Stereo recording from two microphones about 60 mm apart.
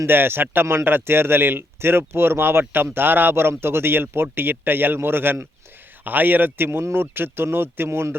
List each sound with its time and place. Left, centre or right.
0.0 s speech: right